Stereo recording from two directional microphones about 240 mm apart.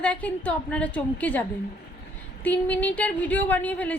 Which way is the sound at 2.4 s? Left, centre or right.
Centre.